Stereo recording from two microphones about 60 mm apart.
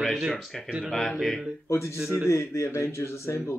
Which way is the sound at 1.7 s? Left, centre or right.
Left.